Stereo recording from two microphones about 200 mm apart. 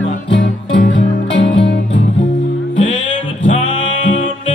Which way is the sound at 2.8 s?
70° left (ahead or behind).